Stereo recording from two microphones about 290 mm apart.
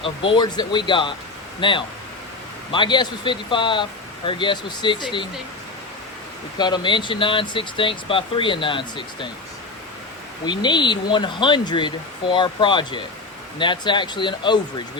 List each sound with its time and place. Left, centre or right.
0.0 s speech: centre
6.6 s speech: centre
10.4 s speech: centre